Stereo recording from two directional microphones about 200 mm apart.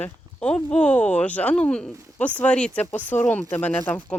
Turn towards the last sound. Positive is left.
turn(degrees=10)  # may be behind; listen again after turning